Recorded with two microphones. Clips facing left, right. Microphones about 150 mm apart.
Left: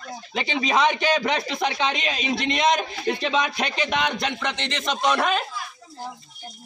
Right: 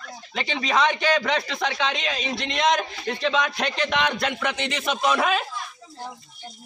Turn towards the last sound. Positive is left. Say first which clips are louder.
# even
turn(degrees=0)  # may be behind; listen again after turning